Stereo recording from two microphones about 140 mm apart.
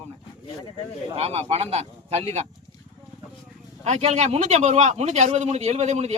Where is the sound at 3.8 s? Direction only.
50° right (ahead or behind).